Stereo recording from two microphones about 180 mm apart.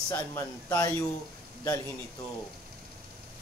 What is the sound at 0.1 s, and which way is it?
Speech, 15° left (ahead or behind).